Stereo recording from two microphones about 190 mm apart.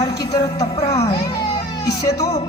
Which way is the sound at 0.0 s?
20° left (ahead or behind).